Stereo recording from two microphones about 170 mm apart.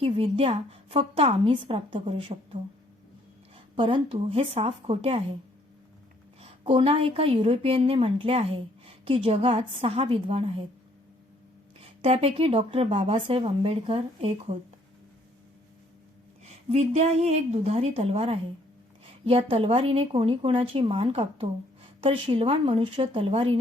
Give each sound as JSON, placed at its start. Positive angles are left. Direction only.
{"t": 0.0, "sound": "a woman's voice", "side_deg": -35}
{"t": 3.8, "sound": "a woman's voice", "side_deg": -30}
{"t": 6.4, "sound": "a woman's voice", "side_deg": -30}
{"t": 11.8, "sound": "a woman's voice", "side_deg": -35}
{"t": 16.4, "sound": "a woman's voice", "side_deg": -40}